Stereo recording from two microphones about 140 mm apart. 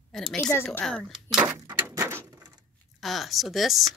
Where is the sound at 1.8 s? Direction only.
20° right (ahead or behind).